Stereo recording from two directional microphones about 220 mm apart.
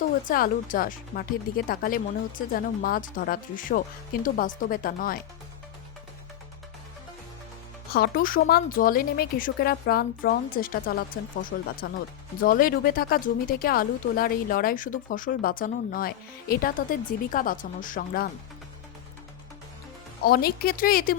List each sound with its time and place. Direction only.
0.3 s speech: 40° left (ahead or behind)
7.9 s a woman's voice: 40° left (ahead or behind)
20.2 s a woman's voice: 45° left (ahead or behind)